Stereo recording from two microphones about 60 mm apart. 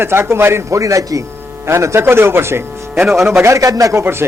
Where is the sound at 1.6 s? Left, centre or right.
Right.